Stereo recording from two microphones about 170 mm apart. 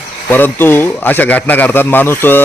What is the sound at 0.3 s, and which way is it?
A man's voice, 10° left (ahead or behind).